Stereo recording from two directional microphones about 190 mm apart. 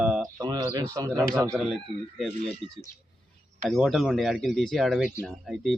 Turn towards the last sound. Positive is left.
turn(degrees=0)  # may be behind; listen again after turning